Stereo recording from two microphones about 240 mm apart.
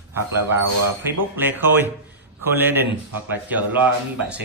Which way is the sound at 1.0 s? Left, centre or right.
Centre.